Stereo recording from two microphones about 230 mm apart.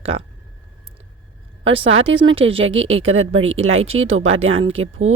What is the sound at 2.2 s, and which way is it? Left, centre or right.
Speech, right.